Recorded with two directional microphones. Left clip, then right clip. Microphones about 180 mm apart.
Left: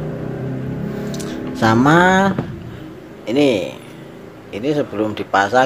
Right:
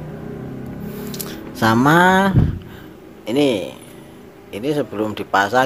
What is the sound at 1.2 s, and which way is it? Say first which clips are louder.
Speech: left 1 dB; 15° right (ahead or behind).